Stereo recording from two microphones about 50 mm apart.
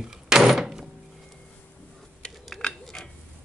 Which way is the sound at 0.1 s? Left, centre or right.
Centre.